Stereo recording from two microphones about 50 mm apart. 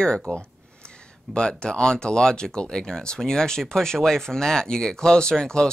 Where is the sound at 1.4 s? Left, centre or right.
Centre.